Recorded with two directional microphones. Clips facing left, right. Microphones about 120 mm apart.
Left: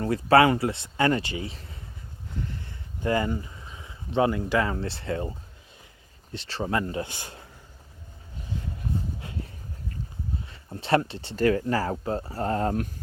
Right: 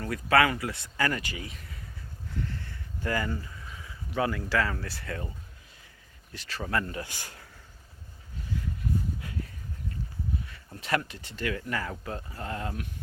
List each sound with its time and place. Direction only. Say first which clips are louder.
0.0 s speech: left 5 dB; 30° left (ahead or behind)
6.3 s speech: left 4 dB; 25° left (ahead or behind)
8.5 s a sound: even; 25° left (ahead or behind)
10.4 s speech: left 4 dB; 25° left (ahead or behind); by 12.9 s 40° left (ahead or behind)